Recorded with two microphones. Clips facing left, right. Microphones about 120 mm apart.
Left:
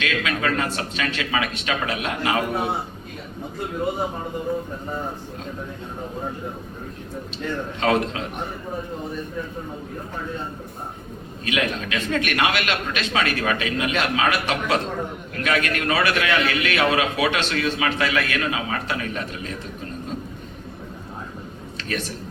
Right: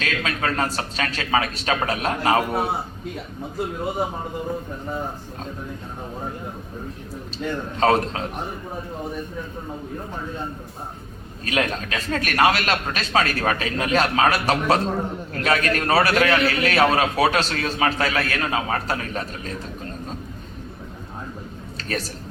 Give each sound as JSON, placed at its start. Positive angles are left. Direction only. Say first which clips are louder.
{"t": 0.0, "sound": "a man's voice", "louder": "left 1 dB", "side_deg": -35}
{"t": 7.4, "sound": "a man's voice", "louder": "right 2 dB", "side_deg": -10}
{"t": 7.8, "sound": "a man's voice", "louder": "right 3 dB", "side_deg": -40}
{"t": 11.4, "sound": "a man's voice", "louder": "right 1 dB", "side_deg": -40}
{"t": 21.8, "sound": "speech", "louder": "right 1 dB", "side_deg": -35}